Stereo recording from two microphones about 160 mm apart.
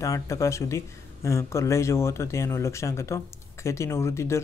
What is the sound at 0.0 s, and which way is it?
A man's voice, 20° left (ahead or behind).